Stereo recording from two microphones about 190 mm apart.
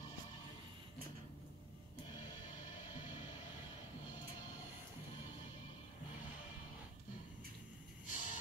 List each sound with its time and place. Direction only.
8.1 s vehicle: 45° left (ahead or behind)